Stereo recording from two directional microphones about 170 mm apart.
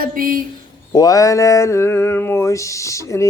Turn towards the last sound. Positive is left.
turn(degrees=20)  # may be behind; listen again after turning